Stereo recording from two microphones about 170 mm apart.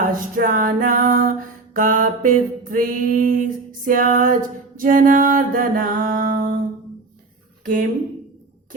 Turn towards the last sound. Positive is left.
turn(degrees=-50)  # may be behind; listen again after turning